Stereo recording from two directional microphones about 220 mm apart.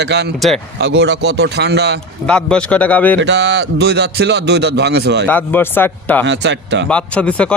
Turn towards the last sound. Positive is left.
turn(degrees=5)  # may be behind; listen again after turning